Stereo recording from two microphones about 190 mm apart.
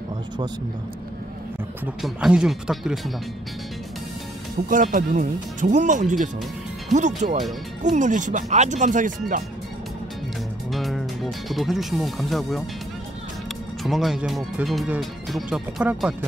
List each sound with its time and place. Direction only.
2.0 s speech: centre (ahead or behind)
4.6 s speech: 45° right (ahead or behind)
10.7 s speech: centre (ahead or behind)
13.8 s speech: centre (ahead or behind)